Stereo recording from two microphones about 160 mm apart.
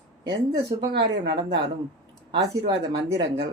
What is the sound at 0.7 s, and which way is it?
Speech, 35° right (ahead or behind).